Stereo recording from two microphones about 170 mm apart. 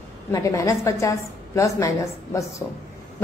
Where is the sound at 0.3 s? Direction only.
20° left (ahead or behind).